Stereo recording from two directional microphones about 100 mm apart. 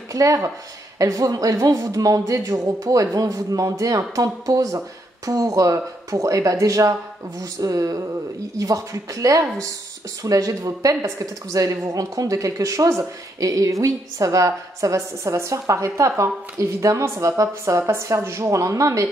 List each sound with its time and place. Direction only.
0.1 s speech: 35° right (ahead or behind)